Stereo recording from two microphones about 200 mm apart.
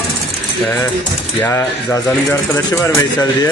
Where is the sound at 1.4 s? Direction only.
10° left (ahead or behind).